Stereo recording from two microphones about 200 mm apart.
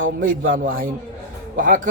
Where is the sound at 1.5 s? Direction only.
45° right (ahead or behind).